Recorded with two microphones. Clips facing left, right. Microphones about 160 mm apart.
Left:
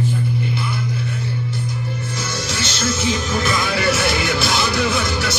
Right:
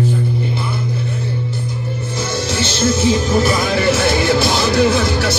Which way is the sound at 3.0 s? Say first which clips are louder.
Right 7 dB; 35° right (ahead or behind).